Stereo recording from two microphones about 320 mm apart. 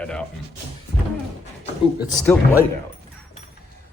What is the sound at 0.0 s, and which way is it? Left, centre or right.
Speech, centre.